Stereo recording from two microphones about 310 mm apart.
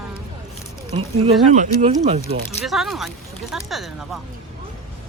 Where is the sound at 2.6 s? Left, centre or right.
Centre.